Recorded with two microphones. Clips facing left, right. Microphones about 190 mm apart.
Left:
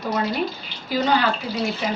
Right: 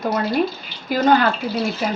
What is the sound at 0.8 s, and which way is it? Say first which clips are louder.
Speech: right 4 dB; 50° right (ahead or behind).